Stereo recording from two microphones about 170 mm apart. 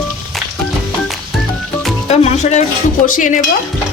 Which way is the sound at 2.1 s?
40° left (ahead or behind).